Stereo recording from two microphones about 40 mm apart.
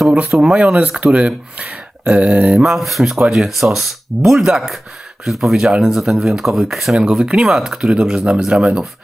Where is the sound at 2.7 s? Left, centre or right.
Centre.